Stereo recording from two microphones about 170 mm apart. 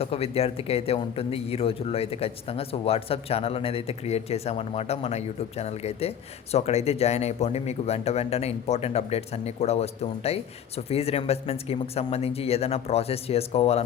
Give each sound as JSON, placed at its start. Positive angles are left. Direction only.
{"t": 0.0, "sound": "speech", "side_deg": 35}